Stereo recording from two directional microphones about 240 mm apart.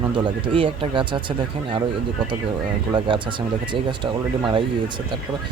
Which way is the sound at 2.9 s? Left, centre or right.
Centre.